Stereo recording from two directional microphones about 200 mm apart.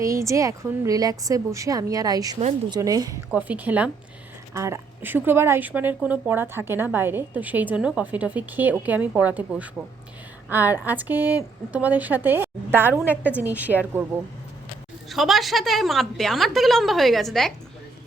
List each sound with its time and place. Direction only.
0.0 s a woman's voice: 15° right (ahead or behind)
3.3 s a woman's voice: 10° right (ahead or behind)
15.1 s a woman's voice: centre (ahead or behind)